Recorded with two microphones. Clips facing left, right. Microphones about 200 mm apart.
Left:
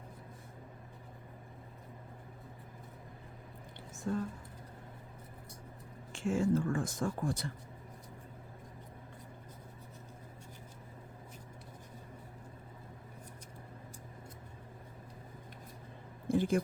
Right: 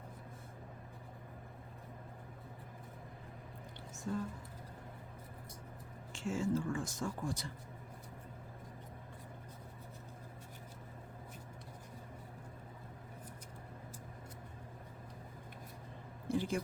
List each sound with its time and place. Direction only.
4.1 s speech: 60° left (ahead or behind)
6.1 s speech: 55° left (ahead or behind)
16.3 s a sound: 55° left (ahead or behind)